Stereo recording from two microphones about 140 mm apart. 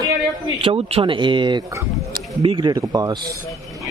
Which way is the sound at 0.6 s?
40° right (ahead or behind).